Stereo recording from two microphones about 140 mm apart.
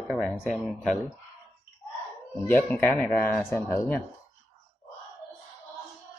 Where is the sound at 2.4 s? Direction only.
15° left (ahead or behind).